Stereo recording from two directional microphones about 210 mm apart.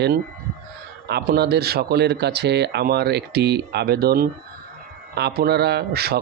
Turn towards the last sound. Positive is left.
turn(degrees=-50)  # may be behind; listen again after turning